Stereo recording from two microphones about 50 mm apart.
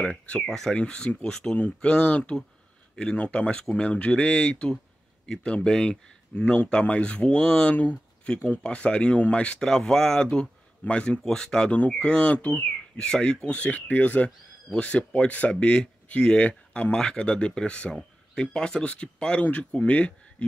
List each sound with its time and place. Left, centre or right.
0.0 s speech: centre
0.5 s speech: centre
0.7 s speech: centre
1.6 s speech: left
8.5 s speech: left
9.6 s speech: centre
11.2 s speech: centre; by 12.6 s left
12.9 s speech: centre
16.9 s speech: centre